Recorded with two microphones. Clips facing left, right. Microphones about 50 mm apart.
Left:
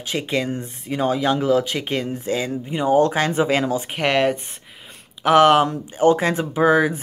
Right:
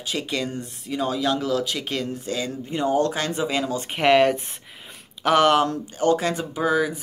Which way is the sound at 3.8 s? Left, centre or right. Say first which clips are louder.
Right 6 dB; centre.